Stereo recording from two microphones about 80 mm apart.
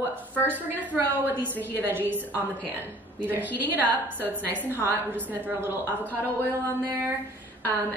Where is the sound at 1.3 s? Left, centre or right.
Right.